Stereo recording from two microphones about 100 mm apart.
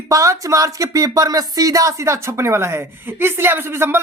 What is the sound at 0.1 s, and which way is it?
Speech, 35° right (ahead or behind).